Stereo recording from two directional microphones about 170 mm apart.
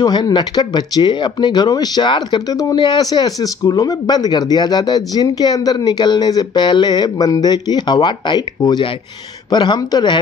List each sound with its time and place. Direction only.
0.0 s speech: 25° left (ahead or behind)